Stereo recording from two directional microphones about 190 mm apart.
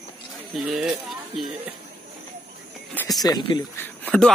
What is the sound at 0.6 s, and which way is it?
Speech, centre (ahead or behind).